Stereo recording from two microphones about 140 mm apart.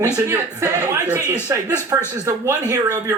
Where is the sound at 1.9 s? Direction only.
20° right (ahead or behind).